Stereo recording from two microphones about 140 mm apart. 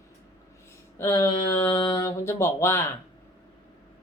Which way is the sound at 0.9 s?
20° left (ahead or behind).